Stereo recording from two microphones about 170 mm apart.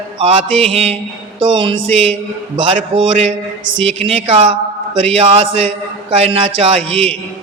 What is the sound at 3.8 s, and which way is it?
Mantra, 35° right (ahead or behind).